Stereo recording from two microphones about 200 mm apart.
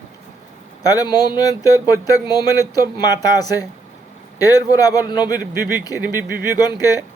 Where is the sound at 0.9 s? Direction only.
20° left (ahead or behind).